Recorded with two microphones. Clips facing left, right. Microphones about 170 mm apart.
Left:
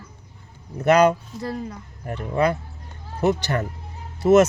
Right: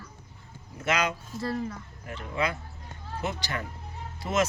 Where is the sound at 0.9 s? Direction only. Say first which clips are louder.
Left 12 dB; 60° left (ahead or behind).